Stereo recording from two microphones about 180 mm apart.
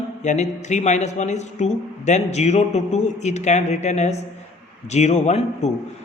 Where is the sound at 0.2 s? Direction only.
40° left (ahead or behind).